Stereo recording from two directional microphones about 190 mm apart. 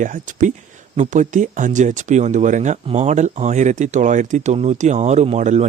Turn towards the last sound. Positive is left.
turn(degrees=-40)  # may be behind; listen again after turning